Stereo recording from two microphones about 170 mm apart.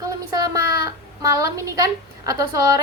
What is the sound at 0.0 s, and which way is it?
A woman's voice, 20° right (ahead or behind).